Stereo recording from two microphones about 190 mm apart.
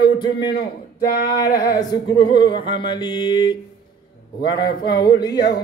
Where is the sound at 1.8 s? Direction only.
25° left (ahead or behind).